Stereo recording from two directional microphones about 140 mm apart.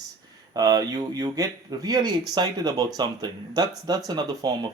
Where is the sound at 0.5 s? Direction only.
25° right (ahead or behind).